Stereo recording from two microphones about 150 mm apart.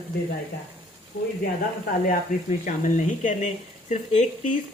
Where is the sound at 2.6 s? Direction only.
60° left (ahead or behind).